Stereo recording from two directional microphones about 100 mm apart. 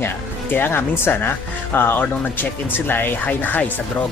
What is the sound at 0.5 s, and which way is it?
A woman's voice, 20° left (ahead or behind).